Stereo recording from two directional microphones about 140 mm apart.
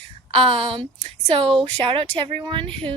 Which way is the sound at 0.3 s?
40° right (ahead or behind).